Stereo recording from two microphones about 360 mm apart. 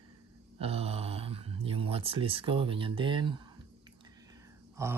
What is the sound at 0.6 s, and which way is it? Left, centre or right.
Speech, centre.